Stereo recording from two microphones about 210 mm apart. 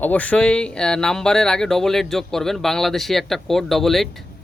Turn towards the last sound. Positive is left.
turn(degrees=0)  # may be behind; listen again after turning